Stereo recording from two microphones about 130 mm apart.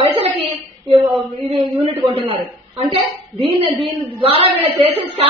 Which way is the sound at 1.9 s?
45° right (ahead or behind).